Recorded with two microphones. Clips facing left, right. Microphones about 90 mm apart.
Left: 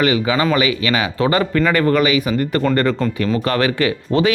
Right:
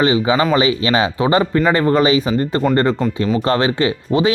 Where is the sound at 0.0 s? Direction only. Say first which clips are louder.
Right 2 dB; 25° right (ahead or behind).